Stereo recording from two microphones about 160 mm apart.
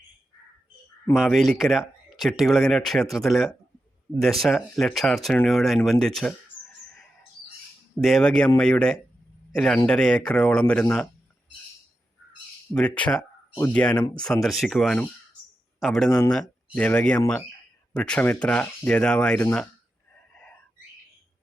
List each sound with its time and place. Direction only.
1.1 s speech: centre (ahead or behind)
8.0 s speech: centre (ahead or behind)
12.7 s speech: 5° left (ahead or behind)
16.0 s speech: 20° left (ahead or behind)
16.7 s speech: 10° left (ahead or behind)
20.3 s a sound: 5° left (ahead or behind)